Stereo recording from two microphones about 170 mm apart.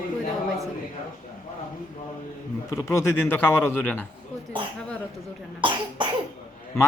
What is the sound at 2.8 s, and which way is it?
A man's voice, 15° left (ahead or behind).